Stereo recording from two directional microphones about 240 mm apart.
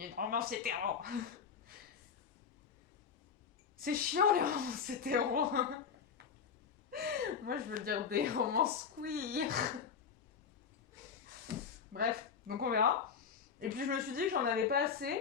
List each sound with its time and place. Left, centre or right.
0.0 s speech: right
3.8 s speech: right
6.9 s speech: right
11.9 s speech: right